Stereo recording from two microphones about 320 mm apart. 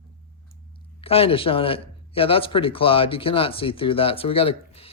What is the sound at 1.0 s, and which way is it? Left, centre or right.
Speech, centre.